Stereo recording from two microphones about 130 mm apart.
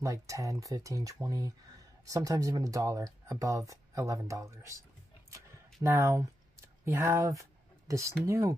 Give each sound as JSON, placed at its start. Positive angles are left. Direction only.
{"t": 0.0, "sound": "speech", "side_deg": -25}
{"t": 5.8, "sound": "speech", "side_deg": -20}